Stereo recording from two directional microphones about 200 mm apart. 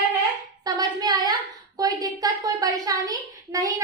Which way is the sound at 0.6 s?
20° right (ahead or behind).